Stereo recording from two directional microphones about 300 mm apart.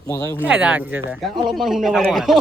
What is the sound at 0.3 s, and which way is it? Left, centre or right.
Speech, centre.